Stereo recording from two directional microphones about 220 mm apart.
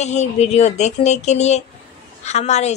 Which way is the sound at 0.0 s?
30° left (ahead or behind).